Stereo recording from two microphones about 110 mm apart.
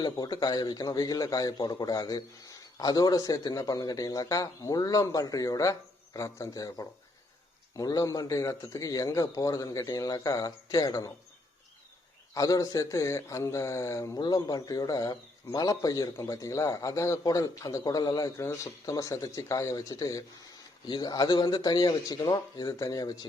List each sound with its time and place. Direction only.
0.0 s a man's voice: 40° left (ahead or behind)
12.3 s speech: 30° left (ahead or behind)
14.2 s a man's voice: 40° left (ahead or behind)